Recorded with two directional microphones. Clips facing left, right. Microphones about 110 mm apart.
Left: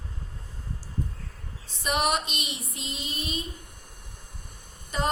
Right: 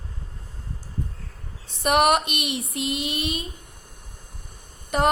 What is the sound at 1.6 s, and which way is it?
Female singing, 65° right (ahead or behind).